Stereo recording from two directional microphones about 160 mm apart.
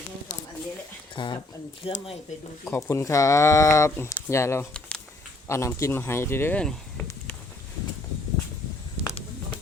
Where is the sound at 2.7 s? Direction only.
15° left (ahead or behind).